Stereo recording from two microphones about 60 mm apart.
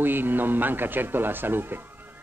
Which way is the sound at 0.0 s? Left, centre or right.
Right.